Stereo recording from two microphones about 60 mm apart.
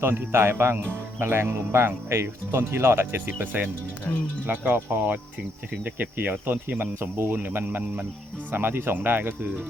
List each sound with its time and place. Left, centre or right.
0.0 s speech: right
4.1 s speech: centre
4.4 s speech: right